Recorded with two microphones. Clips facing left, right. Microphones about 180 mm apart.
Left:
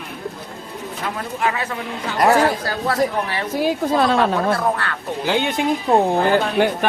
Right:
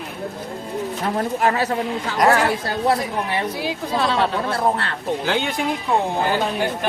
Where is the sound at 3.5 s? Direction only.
50° left (ahead or behind).